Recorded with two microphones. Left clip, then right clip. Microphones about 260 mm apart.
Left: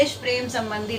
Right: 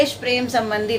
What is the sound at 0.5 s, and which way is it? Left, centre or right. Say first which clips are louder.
Speech: right 7 dB; right.